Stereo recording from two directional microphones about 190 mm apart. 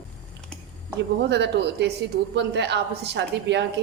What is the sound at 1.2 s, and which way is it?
A woman's voice, 65° right (ahead or behind).